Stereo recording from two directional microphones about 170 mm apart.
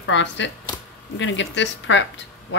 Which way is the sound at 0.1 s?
90° left.